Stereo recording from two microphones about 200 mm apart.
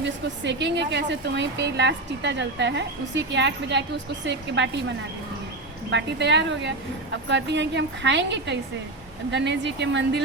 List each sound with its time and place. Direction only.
0.0 s speech: 60° right (ahead or behind)
5.9 s speech: 60° right (ahead or behind)